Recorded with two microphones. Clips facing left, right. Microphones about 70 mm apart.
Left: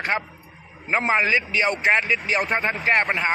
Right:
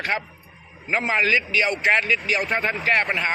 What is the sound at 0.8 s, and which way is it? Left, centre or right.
Speech, left.